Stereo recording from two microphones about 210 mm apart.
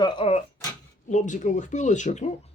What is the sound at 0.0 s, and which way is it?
Speech, 25° left (ahead or behind).